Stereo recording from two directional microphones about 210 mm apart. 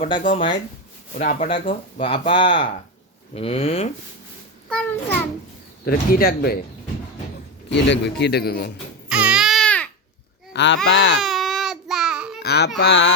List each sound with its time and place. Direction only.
0.2 s speech: 35° left (ahead or behind)
4.7 s a child's voice: 5° left (ahead or behind)
5.8 s a man's voice: 45° left (ahead or behind)
7.7 s a man's voice: 55° left (ahead or behind)
9.0 s baby cry: 5° right (ahead or behind)
10.5 s speech: 55° left (ahead or behind)
11.2 s baby cry: centre (ahead or behind)
12.4 s a man's voice: 50° left (ahead or behind)